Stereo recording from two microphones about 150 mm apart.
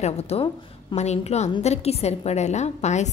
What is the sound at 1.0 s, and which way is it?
A woman's voice, 50° left (ahead or behind).